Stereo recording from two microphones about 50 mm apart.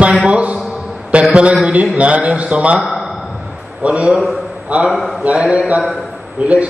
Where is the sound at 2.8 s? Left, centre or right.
Centre.